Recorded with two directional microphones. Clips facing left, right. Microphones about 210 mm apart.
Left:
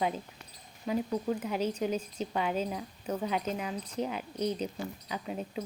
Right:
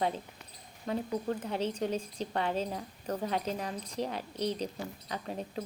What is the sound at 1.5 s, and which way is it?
Speech, 30° right (ahead or behind).